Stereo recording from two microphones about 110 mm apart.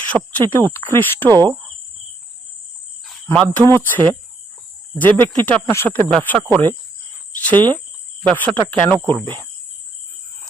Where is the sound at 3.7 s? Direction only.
20° left (ahead or behind).